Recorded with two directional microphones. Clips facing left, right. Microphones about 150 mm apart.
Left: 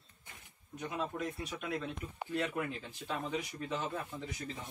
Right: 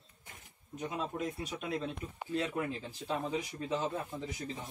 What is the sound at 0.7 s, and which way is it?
Speech, 25° right (ahead or behind).